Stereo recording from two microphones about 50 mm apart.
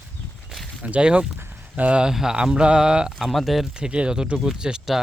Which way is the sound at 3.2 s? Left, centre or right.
Centre.